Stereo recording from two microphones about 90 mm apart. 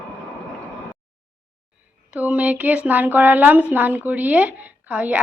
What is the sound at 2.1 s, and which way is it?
A woman's voice, 15° right (ahead or behind).